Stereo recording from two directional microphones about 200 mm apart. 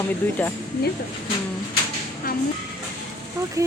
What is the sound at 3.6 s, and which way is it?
Speech, 15° right (ahead or behind).